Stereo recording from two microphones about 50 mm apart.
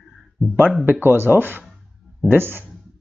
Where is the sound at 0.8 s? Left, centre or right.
Right.